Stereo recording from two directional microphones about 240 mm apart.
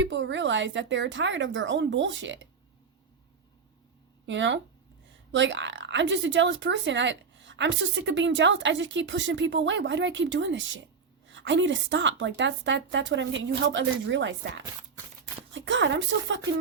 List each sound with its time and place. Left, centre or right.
0.0 s speech: right
4.3 s speech: right